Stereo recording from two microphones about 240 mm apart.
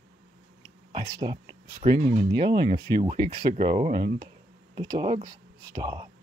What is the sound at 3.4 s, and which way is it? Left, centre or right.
Speech, right.